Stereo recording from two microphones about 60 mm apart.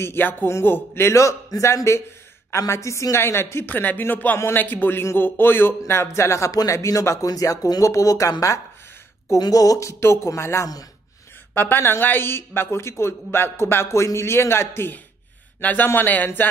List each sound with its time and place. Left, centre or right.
0.0 s a man's voice: left
3.7 s a man's voice: left
6.7 s speech: left
7.2 s speech: left
9.3 s speech: left
9.9 s a man's voice: left
11.5 s a man's voice: left